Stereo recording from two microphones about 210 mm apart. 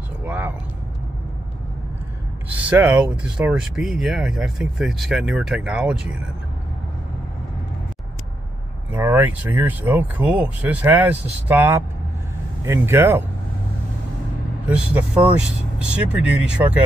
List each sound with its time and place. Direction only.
0.2 s a sound: 5° right (ahead or behind)
2.7 s speech: 5° right (ahead or behind)
8.9 s speech: 10° right (ahead or behind)
14.7 s speech: 5° right (ahead or behind)